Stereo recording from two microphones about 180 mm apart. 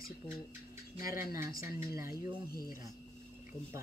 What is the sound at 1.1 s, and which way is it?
Speech, 15° right (ahead or behind).